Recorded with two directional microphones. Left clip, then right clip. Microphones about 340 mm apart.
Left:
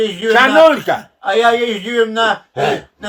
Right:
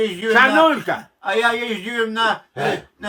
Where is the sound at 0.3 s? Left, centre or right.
Left.